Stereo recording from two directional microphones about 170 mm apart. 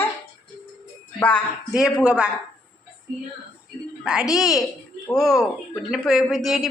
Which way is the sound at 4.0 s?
5° right (ahead or behind).